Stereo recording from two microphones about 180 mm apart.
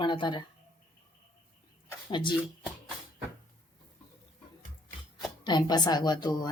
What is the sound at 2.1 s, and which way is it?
Speech, 25° left (ahead or behind).